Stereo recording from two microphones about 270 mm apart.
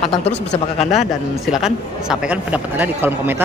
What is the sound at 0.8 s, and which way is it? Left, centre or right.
Speech, left.